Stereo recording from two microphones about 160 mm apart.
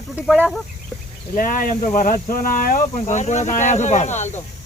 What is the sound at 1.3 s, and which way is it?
Speech, 60° left (ahead or behind).